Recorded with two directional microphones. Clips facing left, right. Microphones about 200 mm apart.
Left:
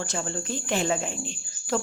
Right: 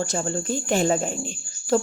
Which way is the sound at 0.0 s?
40° right (ahead or behind).